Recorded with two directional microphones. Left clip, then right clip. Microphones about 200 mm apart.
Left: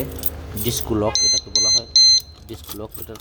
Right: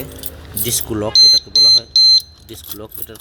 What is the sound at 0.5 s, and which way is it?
Speech, centre (ahead or behind).